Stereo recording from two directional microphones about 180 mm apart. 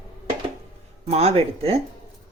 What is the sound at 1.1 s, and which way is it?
Speech, 35° right (ahead or behind).